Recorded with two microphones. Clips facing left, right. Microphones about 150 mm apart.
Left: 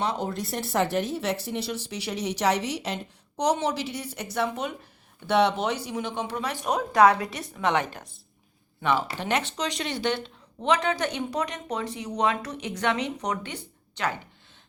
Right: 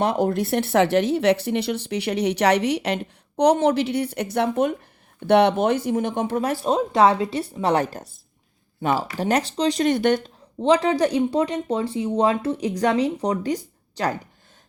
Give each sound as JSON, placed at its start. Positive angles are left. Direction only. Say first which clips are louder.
{"t": 0.0, "sound": "speech", "louder": "right 8 dB", "side_deg": -55}
{"t": 6.7, "sound": "a woman's voice", "louder": "right 1 dB", "side_deg": -25}
{"t": 10.6, "sound": "speech", "louder": "right 7 dB", "side_deg": -30}